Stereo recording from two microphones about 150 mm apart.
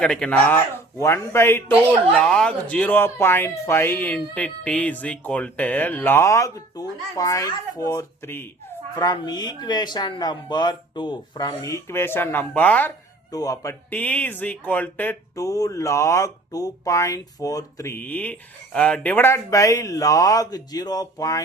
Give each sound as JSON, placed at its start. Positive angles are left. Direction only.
{"t": 0.0, "sound": "speech", "side_deg": 5}
{"t": 9.0, "sound": "speech", "side_deg": 25}
{"t": 13.3, "sound": "speech", "side_deg": 25}
{"t": 13.9, "sound": "speech", "side_deg": 10}